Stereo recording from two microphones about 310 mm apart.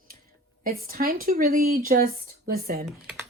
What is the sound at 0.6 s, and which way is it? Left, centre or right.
Speech, right.